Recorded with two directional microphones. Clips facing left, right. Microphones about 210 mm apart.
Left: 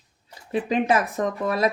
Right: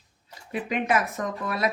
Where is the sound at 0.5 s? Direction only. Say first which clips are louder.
Left 4 dB; 30° left (ahead or behind).